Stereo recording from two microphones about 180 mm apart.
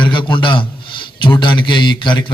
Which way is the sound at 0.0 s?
25° left (ahead or behind).